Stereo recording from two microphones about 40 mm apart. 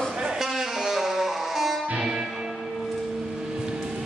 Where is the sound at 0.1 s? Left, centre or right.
Right.